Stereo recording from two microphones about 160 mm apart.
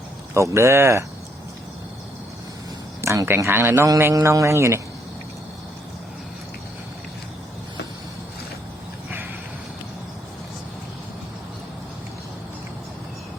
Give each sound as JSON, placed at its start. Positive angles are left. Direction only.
{"t": 0.3, "sound": "a man's voice", "side_deg": -15}
{"t": 3.0, "sound": "a man's voice", "side_deg": -15}